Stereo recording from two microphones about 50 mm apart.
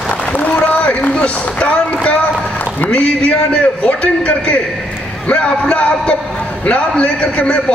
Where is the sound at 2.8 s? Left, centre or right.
Left.